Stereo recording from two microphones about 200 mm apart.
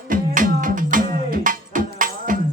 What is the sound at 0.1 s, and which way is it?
Music, 40° right (ahead or behind).